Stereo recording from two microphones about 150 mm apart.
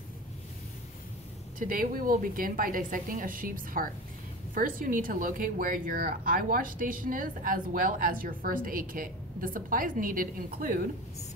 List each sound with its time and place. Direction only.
1.6 s speech: 70° right (ahead or behind)